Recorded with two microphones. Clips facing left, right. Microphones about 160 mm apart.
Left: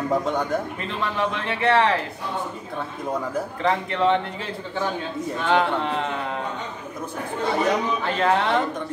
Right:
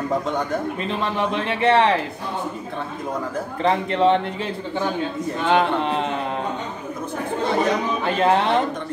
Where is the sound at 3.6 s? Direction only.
20° right (ahead or behind).